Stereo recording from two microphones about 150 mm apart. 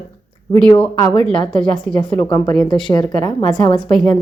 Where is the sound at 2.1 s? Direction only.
15° left (ahead or behind).